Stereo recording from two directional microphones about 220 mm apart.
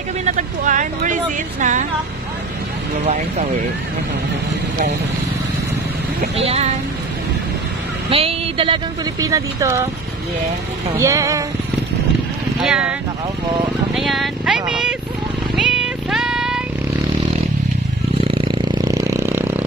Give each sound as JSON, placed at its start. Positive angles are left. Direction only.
{"t": 0.2, "sound": "a sound", "side_deg": -35}
{"t": 6.3, "sound": "speech", "side_deg": -25}
{"t": 8.1, "sound": "speech", "side_deg": -25}
{"t": 11.0, "sound": "speech", "side_deg": -15}
{"t": 12.6, "sound": "speech", "side_deg": -5}
{"t": 13.9, "sound": "speech", "side_deg": 0}
{"t": 15.5, "sound": "cat", "side_deg": -5}
{"t": 18.2, "sound": "vehicle", "side_deg": -25}